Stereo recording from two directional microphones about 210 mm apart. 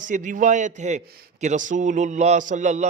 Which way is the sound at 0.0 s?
40° right (ahead or behind).